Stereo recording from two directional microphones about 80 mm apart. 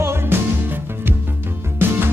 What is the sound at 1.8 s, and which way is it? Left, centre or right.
Music, right.